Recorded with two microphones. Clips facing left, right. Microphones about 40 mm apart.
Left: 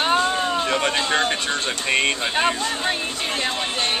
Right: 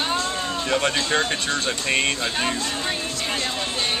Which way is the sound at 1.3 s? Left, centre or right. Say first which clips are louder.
Left 1 dB; centre.